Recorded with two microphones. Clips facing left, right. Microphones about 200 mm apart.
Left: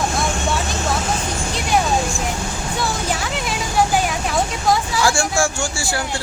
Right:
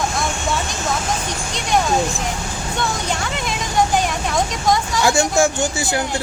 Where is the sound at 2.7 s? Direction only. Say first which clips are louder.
Even; 5° left (ahead or behind).